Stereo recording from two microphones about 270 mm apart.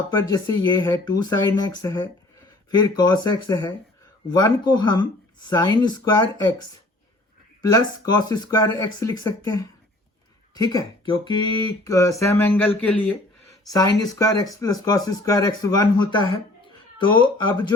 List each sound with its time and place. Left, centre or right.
0.1 s speech: centre
7.6 s speech: centre